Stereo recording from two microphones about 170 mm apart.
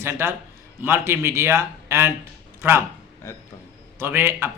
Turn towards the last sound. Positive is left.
turn(degrees=-15)  # may be behind; listen again after turning